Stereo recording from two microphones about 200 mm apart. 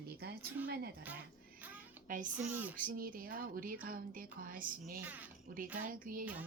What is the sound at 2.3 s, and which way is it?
Speech, 10° right (ahead or behind).